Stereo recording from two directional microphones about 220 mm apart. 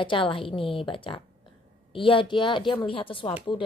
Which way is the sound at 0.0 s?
25° left (ahead or behind).